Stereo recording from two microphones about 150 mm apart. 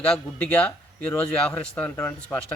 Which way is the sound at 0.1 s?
10° left (ahead or behind).